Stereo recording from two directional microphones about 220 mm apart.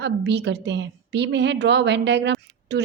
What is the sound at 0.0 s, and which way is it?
A woman's voice, 50° right (ahead or behind).